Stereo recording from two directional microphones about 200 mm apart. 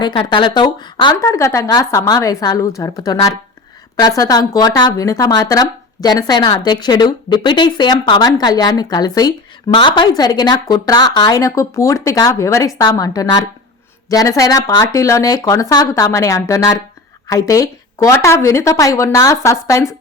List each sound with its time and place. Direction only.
0.0 s speech: 25° left (ahead or behind)